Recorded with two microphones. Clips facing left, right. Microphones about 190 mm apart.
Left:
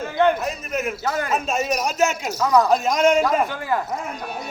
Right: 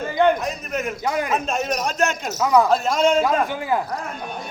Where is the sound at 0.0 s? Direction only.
Centre (ahead or behind).